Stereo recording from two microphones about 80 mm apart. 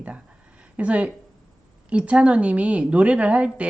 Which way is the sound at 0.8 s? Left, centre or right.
Centre.